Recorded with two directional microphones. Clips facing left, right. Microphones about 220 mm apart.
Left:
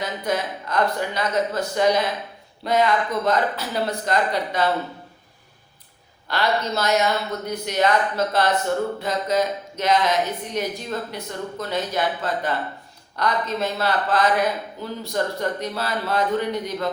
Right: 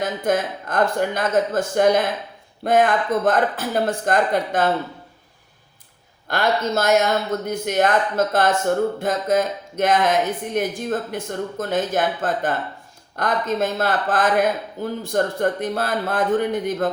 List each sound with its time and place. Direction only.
0.0 s speech: 50° right (ahead or behind)
6.2 s speech: 50° right (ahead or behind)